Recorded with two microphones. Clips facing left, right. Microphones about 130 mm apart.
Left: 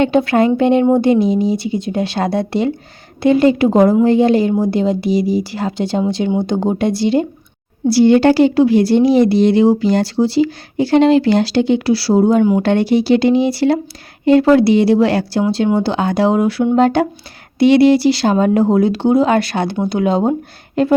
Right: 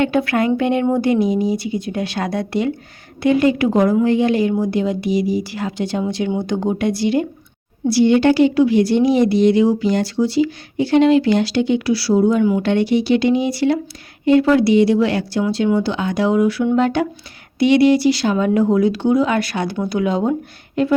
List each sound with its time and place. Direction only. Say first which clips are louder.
0.0 s a woman's voice: left 4 dB; 25° left (ahead or behind)